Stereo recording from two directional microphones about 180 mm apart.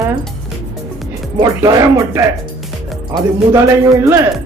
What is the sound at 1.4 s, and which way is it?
Speech, 20° right (ahead or behind).